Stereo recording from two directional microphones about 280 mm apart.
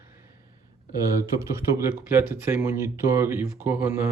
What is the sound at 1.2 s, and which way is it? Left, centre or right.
Speech, centre.